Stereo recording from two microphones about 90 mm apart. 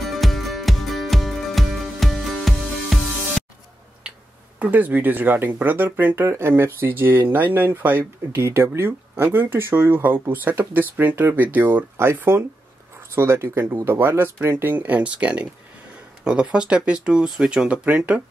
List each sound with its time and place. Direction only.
0.0 s music: centre (ahead or behind)
4.6 s speech: 20° right (ahead or behind)